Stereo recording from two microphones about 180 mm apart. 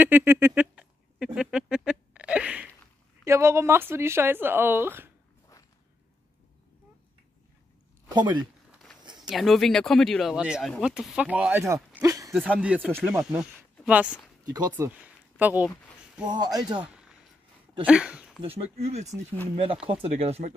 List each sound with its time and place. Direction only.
0.0 s a sound: 10° right (ahead or behind)
3.3 s speech: 15° right (ahead or behind)
8.1 s speech: 25° right (ahead or behind)
9.0 s a sound: 25° right (ahead or behind)
9.3 s speech: centre (ahead or behind)
11.6 s a sound: 15° right (ahead or behind)
12.5 s speech: 5° right (ahead or behind)
16.3 s speech: 20° right (ahead or behind)
17.8 s speech: 5° right (ahead or behind)
18.4 s speech: 35° right (ahead or behind)